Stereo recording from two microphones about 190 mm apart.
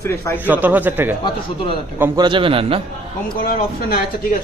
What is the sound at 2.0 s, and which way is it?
Speech, 10° right (ahead or behind).